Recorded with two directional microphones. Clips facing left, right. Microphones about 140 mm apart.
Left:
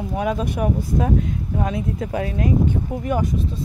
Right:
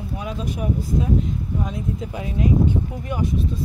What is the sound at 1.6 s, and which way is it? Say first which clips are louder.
Speech: left 6 dB; 75° left (ahead or behind).